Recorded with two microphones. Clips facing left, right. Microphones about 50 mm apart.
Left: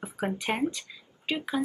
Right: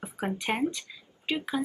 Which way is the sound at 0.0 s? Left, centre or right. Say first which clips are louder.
Left 1 dB; centre.